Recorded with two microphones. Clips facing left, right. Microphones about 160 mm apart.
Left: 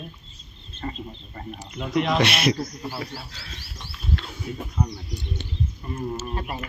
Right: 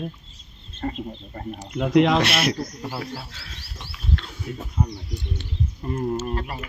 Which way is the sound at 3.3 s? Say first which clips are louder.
Even; centre (ahead or behind).